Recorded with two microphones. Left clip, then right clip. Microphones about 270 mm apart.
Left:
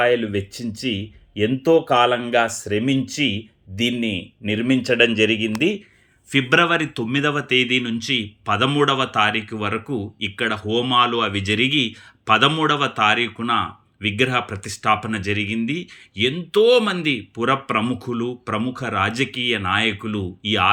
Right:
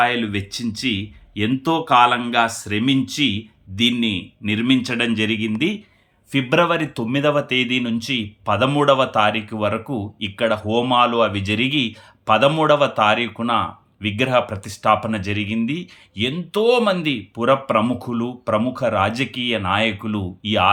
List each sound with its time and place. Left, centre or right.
0.0 s speech: centre
0.9 s speech: right
2.8 s speech: centre